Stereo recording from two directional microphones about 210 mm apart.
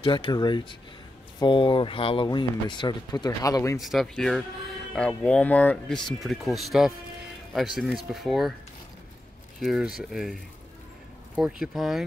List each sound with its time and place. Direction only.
0.0 s speech: 20° left (ahead or behind)
3.8 s speech: centre (ahead or behind)
9.6 s speech: centre (ahead or behind)
11.6 s speech: centre (ahead or behind)